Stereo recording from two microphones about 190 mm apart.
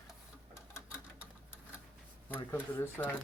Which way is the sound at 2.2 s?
10° left (ahead or behind).